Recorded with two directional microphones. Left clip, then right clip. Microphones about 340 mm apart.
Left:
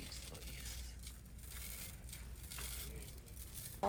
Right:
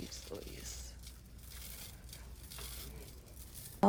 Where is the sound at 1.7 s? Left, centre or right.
Centre.